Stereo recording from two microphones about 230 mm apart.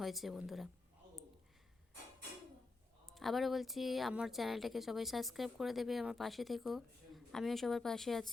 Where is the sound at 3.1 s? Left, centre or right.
Centre.